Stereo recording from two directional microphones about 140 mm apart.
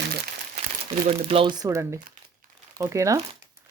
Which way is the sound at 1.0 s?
40° right (ahead or behind).